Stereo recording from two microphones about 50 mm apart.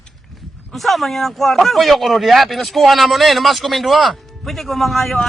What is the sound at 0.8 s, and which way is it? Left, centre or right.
Speech, centre.